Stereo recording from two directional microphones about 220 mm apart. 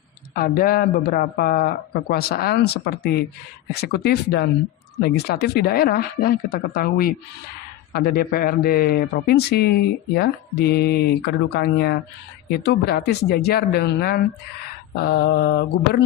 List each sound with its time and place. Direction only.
0.3 s speech: 40° left (ahead or behind)